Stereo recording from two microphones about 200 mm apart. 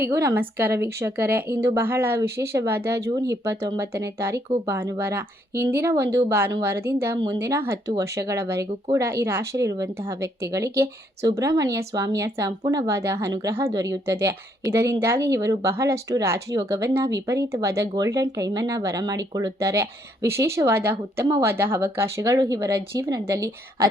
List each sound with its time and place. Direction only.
0.1 s speech: 15° right (ahead or behind)